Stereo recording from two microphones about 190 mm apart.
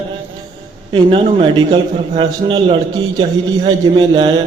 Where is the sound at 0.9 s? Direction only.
25° right (ahead or behind).